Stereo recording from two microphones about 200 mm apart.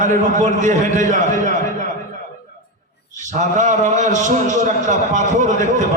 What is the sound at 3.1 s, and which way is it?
A man's voice, 40° right (ahead or behind).